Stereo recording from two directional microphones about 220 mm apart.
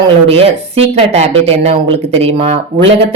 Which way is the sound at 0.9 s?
30° right (ahead or behind).